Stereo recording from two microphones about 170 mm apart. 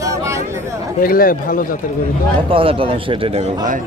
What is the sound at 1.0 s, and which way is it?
Speech, 55° left (ahead or behind).